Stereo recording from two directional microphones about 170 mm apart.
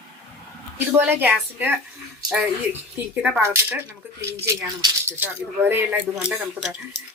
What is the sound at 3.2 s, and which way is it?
Speech, 10° right (ahead or behind).